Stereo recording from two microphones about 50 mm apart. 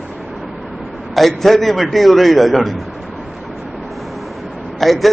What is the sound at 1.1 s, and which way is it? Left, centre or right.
A man's voice, centre.